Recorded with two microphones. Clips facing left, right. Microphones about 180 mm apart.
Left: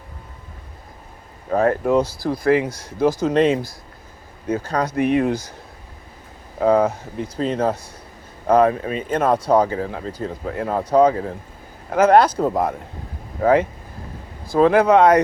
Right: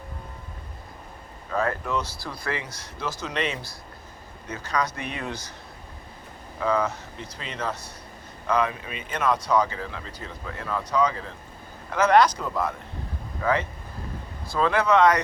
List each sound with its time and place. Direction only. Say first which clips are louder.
1.5 s speech: left 9 dB; 40° left (ahead or behind)
2.6 s speech: left 11 dB; 10° left (ahead or behind)
3.2 s speech: left 10 dB; 50° left (ahead or behind)
5.3 s speech: left 11 dB; 10° left (ahead or behind)
6.6 s speech: left 8 dB; 50° left (ahead or behind)